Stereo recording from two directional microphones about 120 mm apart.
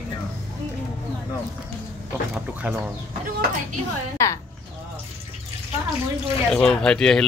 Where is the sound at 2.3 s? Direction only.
10° right (ahead or behind).